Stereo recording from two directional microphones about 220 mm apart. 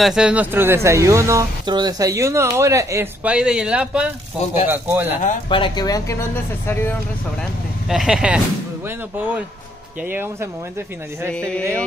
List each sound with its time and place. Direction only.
0.0 s speech: 5° right (ahead or behind)
5.5 s speech: 20° left (ahead or behind)
7.9 s speech: centre (ahead or behind)
10.0 s speech: 10° right (ahead or behind)
11.3 s speech: 5° left (ahead or behind)